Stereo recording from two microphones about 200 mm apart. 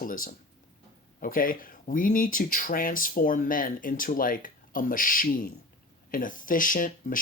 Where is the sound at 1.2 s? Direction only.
45° left (ahead or behind).